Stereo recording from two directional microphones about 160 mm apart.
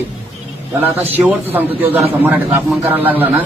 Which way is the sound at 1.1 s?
10° right (ahead or behind).